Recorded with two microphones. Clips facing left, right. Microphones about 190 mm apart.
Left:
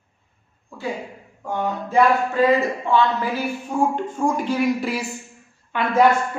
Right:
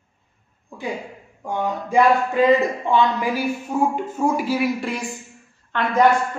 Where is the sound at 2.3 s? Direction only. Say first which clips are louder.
Right 1 dB; 20° right (ahead or behind).